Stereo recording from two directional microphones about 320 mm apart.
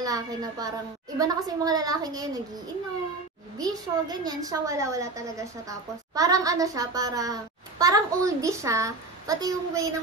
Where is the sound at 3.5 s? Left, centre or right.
Centre.